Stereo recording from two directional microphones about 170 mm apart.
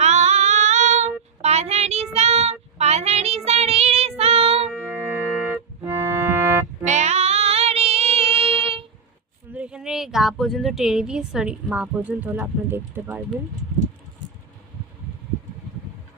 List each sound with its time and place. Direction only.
0.0 s female singing: 40° right (ahead or behind)
1.4 s child singing: 40° right (ahead or behind)
4.9 s music: 10° right (ahead or behind)
6.8 s child singing: 40° right (ahead or behind)
9.6 s a woman's voice: 5° right (ahead or behind)